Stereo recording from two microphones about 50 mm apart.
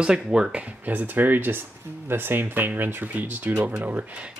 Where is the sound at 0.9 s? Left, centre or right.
Right.